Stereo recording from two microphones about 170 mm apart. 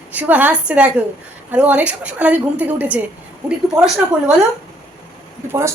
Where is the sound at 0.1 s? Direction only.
10° right (ahead or behind).